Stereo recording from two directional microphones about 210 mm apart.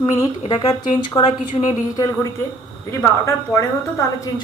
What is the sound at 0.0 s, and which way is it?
A woman's voice, 20° left (ahead or behind).